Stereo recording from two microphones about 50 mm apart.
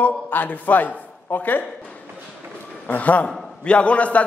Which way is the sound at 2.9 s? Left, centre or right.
Left.